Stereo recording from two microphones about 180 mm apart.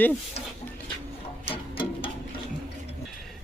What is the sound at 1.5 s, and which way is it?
Music, 30° left (ahead or behind).